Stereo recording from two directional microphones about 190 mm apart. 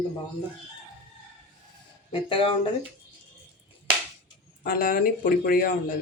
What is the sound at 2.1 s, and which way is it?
Speech, 30° left (ahead or behind).